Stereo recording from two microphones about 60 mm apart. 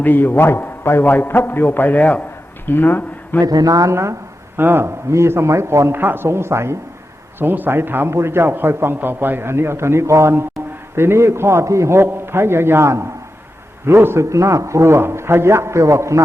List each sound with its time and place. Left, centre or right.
0.0 s a man's voice: left
3.4 s speech: right
4.5 s a man's voice: right
5.9 s a man's voice: right
7.3 s speech: right
8.1 s a man's voice: right
14.3 s a man's voice: right